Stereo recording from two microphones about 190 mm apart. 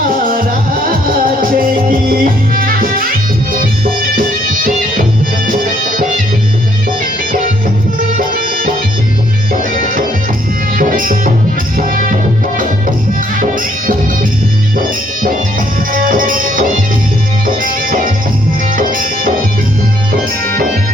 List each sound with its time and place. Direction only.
0.3 s music: 50° right (ahead or behind)
8.2 s music: 50° right (ahead or behind)
15.9 s music: 45° right (ahead or behind)